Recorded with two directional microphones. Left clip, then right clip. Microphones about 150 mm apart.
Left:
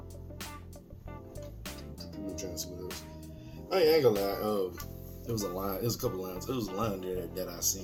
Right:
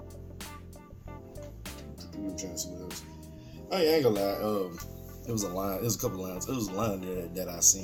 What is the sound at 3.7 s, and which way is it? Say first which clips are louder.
Speech: left 1 dB; 5° right (ahead or behind).